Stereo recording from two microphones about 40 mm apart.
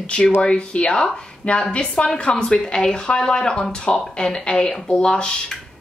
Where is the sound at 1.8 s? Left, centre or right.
Left.